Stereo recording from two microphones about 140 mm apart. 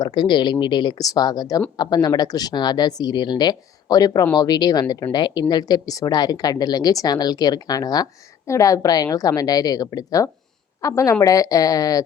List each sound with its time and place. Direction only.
0.0 s a woman's voice: 35° left (ahead or behind)